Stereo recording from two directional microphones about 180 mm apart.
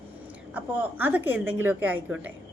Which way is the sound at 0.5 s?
10° right (ahead or behind).